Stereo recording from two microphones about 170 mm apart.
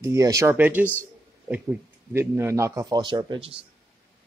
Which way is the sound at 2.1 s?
15° right (ahead or behind).